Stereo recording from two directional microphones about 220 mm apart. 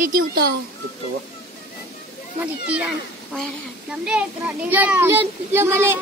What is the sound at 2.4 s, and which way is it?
A child's voice, 5° right (ahead or behind).